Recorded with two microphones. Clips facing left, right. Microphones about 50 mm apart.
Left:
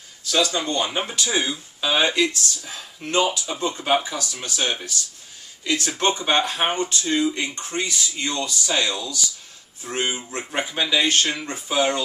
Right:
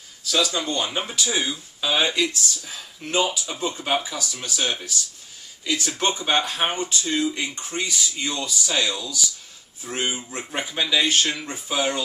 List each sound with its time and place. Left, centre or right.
0.3 s speech: centre